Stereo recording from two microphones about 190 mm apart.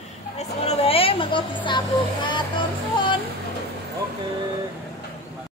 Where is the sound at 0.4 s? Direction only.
35° left (ahead or behind).